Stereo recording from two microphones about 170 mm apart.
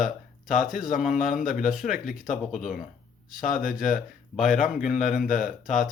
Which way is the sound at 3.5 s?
50° left (ahead or behind).